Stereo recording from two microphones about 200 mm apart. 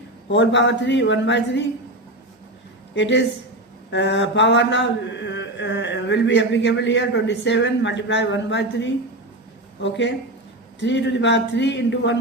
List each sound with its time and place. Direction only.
0.3 s mantra: 60° left (ahead or behind)
2.9 s mantra: 60° left (ahead or behind)
10.8 s mantra: 65° left (ahead or behind)